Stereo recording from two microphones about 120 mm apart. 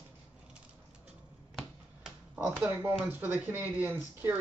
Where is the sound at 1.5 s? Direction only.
5° right (ahead or behind).